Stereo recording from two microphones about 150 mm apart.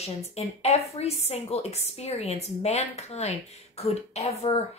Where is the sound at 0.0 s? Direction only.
45° left (ahead or behind).